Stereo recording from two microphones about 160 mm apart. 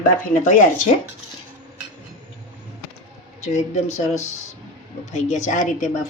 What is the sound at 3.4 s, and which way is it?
A woman's voice, 45° left (ahead or behind).